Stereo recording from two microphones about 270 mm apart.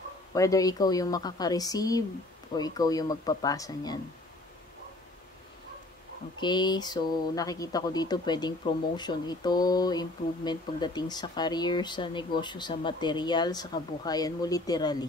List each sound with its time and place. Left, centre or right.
0.3 s speech: centre
6.4 s speech: centre